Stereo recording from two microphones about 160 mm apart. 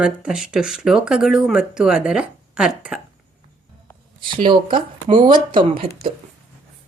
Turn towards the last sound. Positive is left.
turn(degrees=-35)  # may be behind; listen again after turning